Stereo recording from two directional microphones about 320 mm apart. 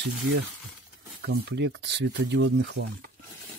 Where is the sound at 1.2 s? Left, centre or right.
Right.